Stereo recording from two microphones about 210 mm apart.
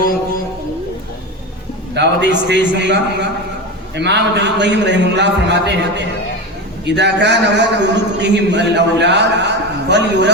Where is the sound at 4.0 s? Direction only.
55° right (ahead or behind).